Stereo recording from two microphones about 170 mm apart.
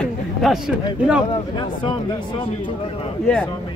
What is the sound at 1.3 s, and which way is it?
Speech, 30° left (ahead or behind).